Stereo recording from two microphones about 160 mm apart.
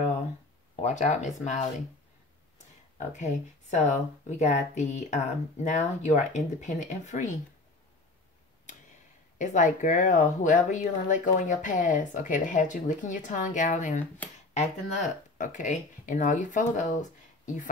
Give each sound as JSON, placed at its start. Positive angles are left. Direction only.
{"t": 0.7, "sound": "speech", "side_deg": 50}
{"t": 3.1, "sound": "speech", "side_deg": 45}
{"t": 9.4, "sound": "speech", "side_deg": 50}